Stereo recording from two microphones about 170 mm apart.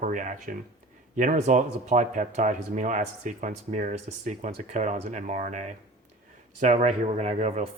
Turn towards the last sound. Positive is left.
turn(degrees=-45)  # may be behind; listen again after turning